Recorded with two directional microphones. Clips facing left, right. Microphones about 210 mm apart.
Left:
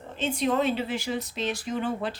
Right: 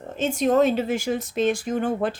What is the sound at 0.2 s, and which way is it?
Speech, 45° right (ahead or behind).